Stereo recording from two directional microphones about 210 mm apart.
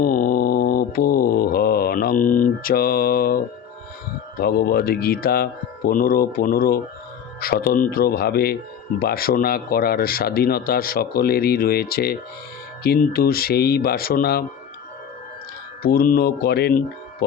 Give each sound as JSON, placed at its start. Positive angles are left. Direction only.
{"t": 0.0, "sound": "mantra", "side_deg": 45}
{"t": 4.4, "sound": "speech", "side_deg": 45}
{"t": 15.8, "sound": "speech", "side_deg": 45}